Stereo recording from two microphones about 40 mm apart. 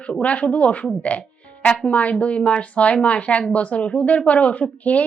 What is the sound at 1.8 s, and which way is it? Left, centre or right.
Speech, left.